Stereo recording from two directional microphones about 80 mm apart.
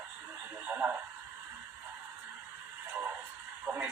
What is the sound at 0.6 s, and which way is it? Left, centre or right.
Speech, right.